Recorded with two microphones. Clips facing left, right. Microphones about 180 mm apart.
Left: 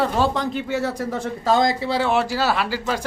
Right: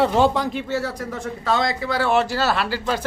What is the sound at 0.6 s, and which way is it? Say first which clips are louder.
Speech: left 1 dB; 15° left (ahead or behind).